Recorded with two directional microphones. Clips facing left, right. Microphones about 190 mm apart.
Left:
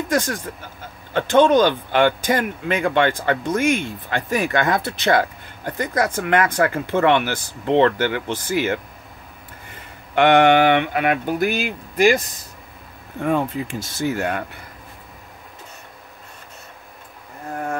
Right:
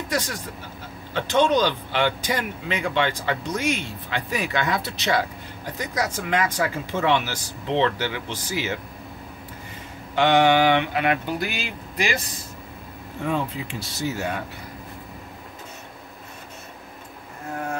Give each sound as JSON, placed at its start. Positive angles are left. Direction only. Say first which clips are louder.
{"t": 0.1, "sound": "speech", "louder": "left 5 dB", "side_deg": 50}
{"t": 10.1, "sound": "speech", "louder": "left 4 dB", "side_deg": 60}
{"t": 13.2, "sound": "speech", "louder": "left 5 dB", "side_deg": 50}